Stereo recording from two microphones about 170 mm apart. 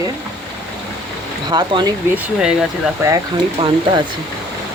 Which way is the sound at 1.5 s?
25° right (ahead or behind).